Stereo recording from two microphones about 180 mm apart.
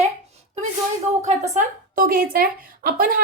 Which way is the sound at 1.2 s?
40° right (ahead or behind).